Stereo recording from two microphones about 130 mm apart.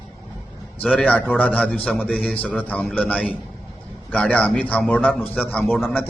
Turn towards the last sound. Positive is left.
turn(degrees=15)  # may be behind; listen again after turning